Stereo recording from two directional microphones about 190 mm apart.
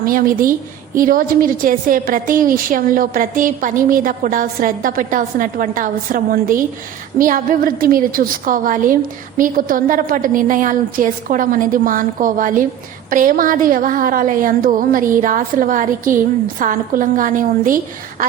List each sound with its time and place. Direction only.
0.0 s a woman's voice: 50° right (ahead or behind)